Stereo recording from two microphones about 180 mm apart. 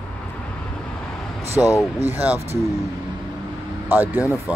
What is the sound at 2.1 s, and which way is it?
Speech, 10° right (ahead or behind).